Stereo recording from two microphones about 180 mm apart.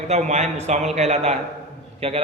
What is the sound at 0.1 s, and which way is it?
A man's voice, 40° right (ahead or behind).